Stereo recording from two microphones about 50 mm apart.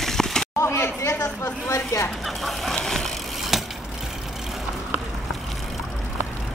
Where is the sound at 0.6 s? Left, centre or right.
Left.